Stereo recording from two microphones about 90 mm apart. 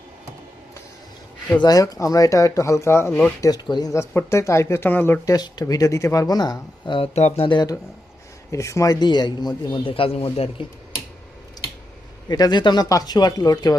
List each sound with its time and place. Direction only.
1.5 s speech: 45° left (ahead or behind); by 3.2 s 30° left (ahead or behind)
3.4 s speech: 45° left (ahead or behind)
3.9 s speech: 30° left (ahead or behind)
5.2 s speech: 45° left (ahead or behind); by 7.7 s 65° left (ahead or behind)
8.4 s speech: 35° left (ahead or behind)
9.0 s speech: 50° left (ahead or behind)
9.9 s speech: 90° left
12.3 s speech: 50° left (ahead or behind)